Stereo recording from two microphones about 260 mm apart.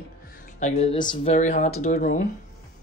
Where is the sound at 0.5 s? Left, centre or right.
Left.